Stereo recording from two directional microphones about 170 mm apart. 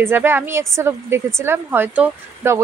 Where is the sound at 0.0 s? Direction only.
15° right (ahead or behind).